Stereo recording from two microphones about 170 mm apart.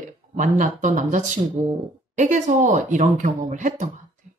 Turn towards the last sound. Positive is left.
turn(degrees=-45)  # may be behind; listen again after turning